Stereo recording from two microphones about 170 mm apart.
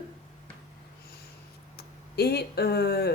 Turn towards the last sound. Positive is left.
turn(degrees=70)  # may be behind; listen again after turning